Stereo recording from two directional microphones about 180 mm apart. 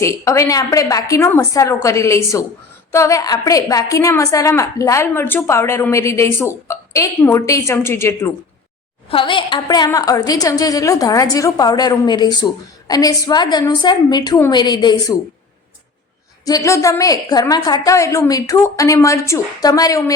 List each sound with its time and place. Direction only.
0.0 s a woman's voice: 15° left (ahead or behind)
9.0 s a woman's voice: 30° left (ahead or behind)
16.5 s a woman's voice: 20° left (ahead or behind)